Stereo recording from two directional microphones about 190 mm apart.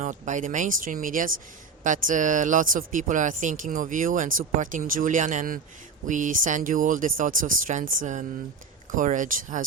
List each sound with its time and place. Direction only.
0.0 s speech: 40° right (ahead or behind)